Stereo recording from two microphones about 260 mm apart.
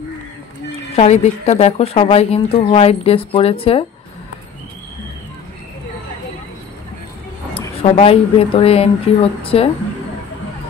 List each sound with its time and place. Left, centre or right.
0.9 s a woman's voice: left
7.5 s a woman's voice: left